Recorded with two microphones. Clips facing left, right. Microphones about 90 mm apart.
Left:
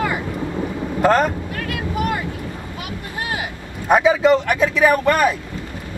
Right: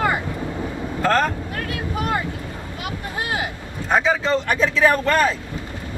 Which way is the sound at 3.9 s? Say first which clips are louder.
Left 5 dB; 15° left (ahead or behind).